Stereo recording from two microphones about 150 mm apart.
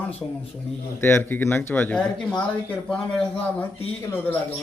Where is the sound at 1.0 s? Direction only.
15° left (ahead or behind).